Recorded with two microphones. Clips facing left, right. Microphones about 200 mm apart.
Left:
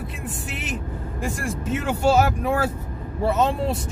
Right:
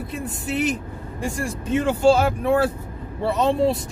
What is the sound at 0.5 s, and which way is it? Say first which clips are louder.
Speech: right 12 dB; centre (ahead or behind).